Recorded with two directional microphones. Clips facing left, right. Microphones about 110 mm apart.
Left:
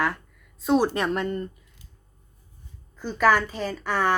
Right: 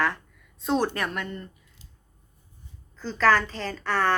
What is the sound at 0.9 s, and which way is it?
Speech, 25° left (ahead or behind).